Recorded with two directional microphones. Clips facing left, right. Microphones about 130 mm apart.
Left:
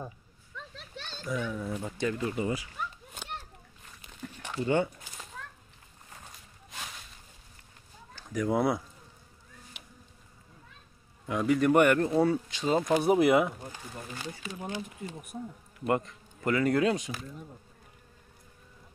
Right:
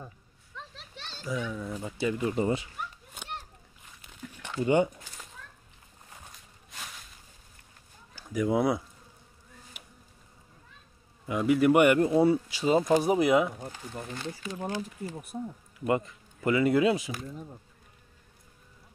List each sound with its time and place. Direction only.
1.2 s speech: centre (ahead or behind)
1.9 s speech: 5° right (ahead or behind)
2.3 s speech: 30° right (ahead or behind)
4.2 s a sound: 50° left (ahead or behind)
4.6 s speech: 15° right (ahead or behind)
8.1 s speech: 5° right (ahead or behind)
11.2 s speech: 5° right (ahead or behind)
15.9 s speech: 5° right (ahead or behind)